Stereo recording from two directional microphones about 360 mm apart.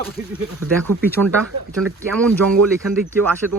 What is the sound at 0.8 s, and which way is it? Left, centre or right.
Speech, centre.